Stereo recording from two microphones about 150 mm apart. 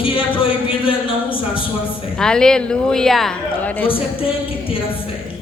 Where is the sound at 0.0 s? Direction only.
35° left (ahead or behind).